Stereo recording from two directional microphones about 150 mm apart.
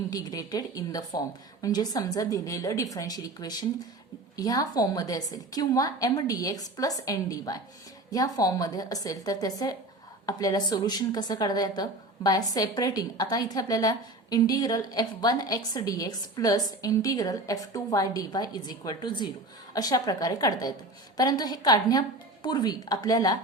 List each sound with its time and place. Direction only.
0.1 s a woman's voice: 25° left (ahead or behind)